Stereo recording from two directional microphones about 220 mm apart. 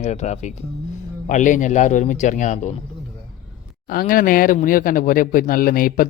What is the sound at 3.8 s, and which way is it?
Speech, 40° left (ahead or behind).